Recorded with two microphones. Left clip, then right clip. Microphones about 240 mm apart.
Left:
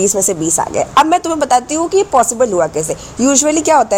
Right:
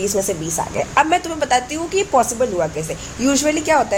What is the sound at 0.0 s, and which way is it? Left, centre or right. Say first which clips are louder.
A woman's voice: left 6 dB; left.